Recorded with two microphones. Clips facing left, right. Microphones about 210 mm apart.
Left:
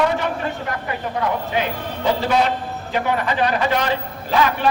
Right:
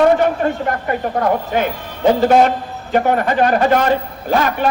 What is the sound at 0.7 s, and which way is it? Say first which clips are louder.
A man's voice: right 6 dB; 50° right (ahead or behind).